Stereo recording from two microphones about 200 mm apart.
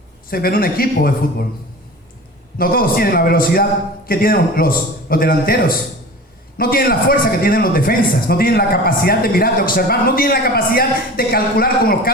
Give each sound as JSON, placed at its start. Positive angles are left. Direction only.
{"t": 0.3, "sound": "a man's voice", "side_deg": 50}
{"t": 2.6, "sound": "a man's voice", "side_deg": 45}